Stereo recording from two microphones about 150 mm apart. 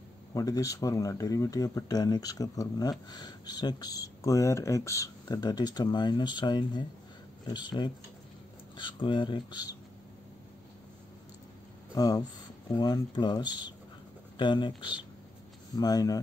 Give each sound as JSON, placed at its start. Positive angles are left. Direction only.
{"t": 0.3, "sound": "speech", "side_deg": 25}
{"t": 11.9, "sound": "speech", "side_deg": 25}